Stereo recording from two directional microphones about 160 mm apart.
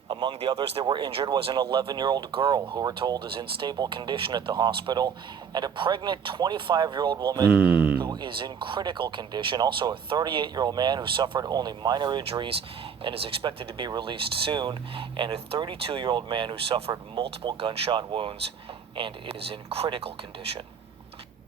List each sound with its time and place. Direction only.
0.1 s speech: 30° right (ahead or behind)
7.5 s speech: 10° right (ahead or behind)
8.0 s speech: 30° right (ahead or behind)